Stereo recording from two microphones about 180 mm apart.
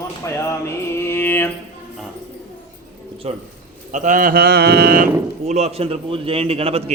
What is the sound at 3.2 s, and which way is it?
Speech, 35° right (ahead or behind).